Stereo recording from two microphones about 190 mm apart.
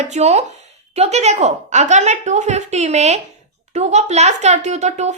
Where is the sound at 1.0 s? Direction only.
35° right (ahead or behind).